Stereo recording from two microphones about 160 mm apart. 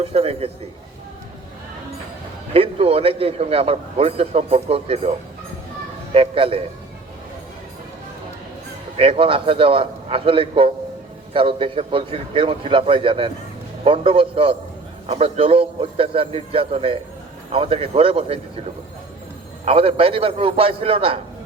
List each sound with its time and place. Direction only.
0.0 s a man's voice: 40° right (ahead or behind)
2.5 s a man's voice: 35° right (ahead or behind)
6.1 s a man's voice: 35° right (ahead or behind)
9.0 s a man's voice: 35° right (ahead or behind)
19.6 s a man's voice: 35° right (ahead or behind)